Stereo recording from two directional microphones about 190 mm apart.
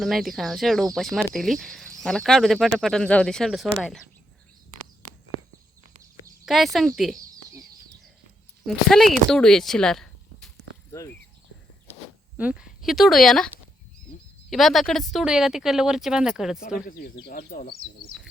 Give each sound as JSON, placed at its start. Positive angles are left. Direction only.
{"t": 0.0, "sound": "speech", "side_deg": 0}
{"t": 6.4, "sound": "speech", "side_deg": 0}
{"t": 8.6, "sound": "speech", "side_deg": 0}
{"t": 12.4, "sound": "speech", "side_deg": -5}
{"t": 14.5, "sound": "speech", "side_deg": 0}
{"t": 16.8, "sound": "speech", "side_deg": 55}